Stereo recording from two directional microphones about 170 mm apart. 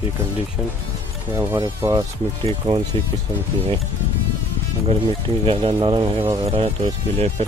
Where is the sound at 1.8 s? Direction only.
20° right (ahead or behind).